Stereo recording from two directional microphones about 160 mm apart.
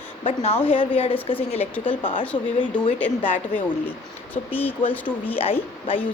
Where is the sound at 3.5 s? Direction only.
10° left (ahead or behind).